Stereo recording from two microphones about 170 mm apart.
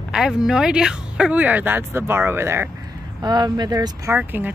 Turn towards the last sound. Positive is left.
turn(degrees=-10)  # may be behind; listen again after turning